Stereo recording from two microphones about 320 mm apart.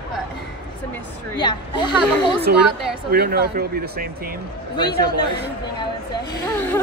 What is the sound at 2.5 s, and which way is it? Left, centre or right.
Speech, right.